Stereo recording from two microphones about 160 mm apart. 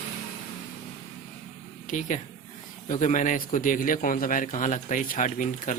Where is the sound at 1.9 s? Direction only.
50° left (ahead or behind).